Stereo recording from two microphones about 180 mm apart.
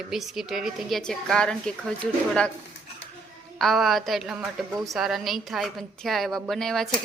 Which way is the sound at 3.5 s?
Centre (ahead or behind).